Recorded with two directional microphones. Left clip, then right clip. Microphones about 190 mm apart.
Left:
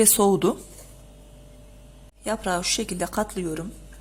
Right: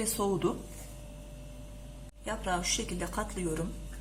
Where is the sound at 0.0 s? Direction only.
55° left (ahead or behind).